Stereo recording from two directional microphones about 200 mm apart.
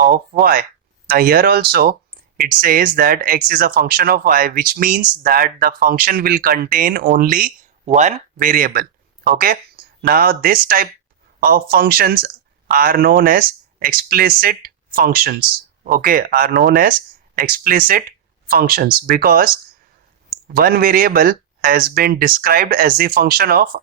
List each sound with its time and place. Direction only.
0.0 s speech: 45° right (ahead or behind)